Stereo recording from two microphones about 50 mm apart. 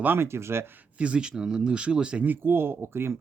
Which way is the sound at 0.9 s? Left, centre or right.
Right.